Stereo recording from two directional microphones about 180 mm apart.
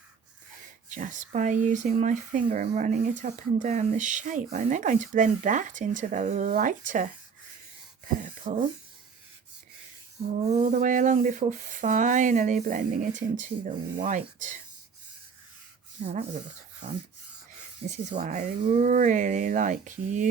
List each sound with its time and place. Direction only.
0.9 s speech: 45° right (ahead or behind)
8.0 s a sound: 45° right (ahead or behind)
10.3 s speech: 40° right (ahead or behind)
16.0 s speech: 40° right (ahead or behind)
17.8 s speech: 40° right (ahead or behind)